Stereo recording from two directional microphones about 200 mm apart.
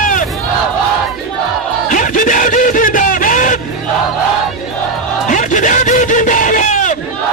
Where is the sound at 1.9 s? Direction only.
40° left (ahead or behind).